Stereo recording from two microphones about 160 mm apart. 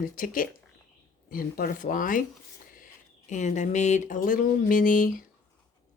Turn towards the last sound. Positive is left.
turn(degrees=60)  # may be behind; listen again after turning